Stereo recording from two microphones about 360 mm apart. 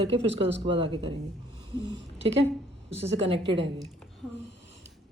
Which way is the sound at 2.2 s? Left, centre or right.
Right.